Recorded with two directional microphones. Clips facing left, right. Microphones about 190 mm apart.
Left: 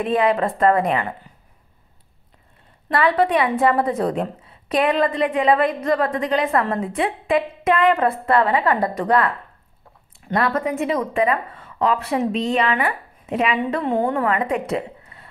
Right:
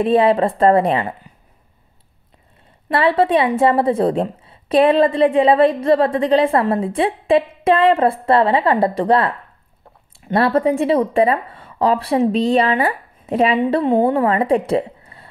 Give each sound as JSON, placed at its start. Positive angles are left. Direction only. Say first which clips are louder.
{"t": 0.0, "sound": "a woman's voice", "louder": "right 5 dB", "side_deg": -30}
{"t": 2.9, "sound": "a woman's voice", "louder": "right 3 dB", "side_deg": -25}
{"t": 10.3, "sound": "a woman's voice", "louder": "right 6 dB", "side_deg": -30}